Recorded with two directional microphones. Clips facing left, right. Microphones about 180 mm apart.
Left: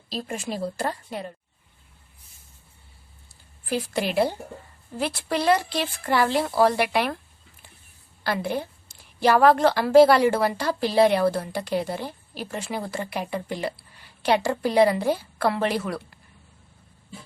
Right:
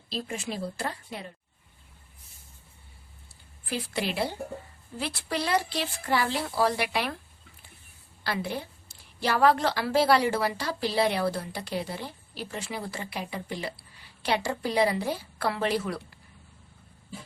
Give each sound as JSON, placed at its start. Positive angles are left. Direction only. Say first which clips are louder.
{"t": 0.1, "sound": "a woman's voice", "louder": "left 3 dB", "side_deg": 40}
{"t": 3.7, "sound": "a woman's voice", "louder": "left 5 dB", "side_deg": 50}
{"t": 8.2, "sound": "a woman's voice", "louder": "left 5 dB", "side_deg": 50}